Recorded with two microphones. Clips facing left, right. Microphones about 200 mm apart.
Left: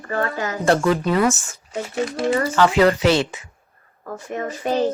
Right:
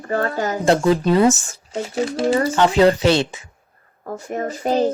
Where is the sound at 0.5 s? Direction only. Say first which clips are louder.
Right 1 dB; 20° right (ahead or behind).